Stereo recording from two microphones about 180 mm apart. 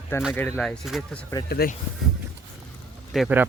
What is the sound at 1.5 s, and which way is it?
Speech, 60° left (ahead or behind).